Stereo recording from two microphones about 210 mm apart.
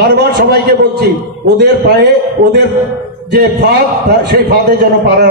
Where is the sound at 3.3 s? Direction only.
50° right (ahead or behind).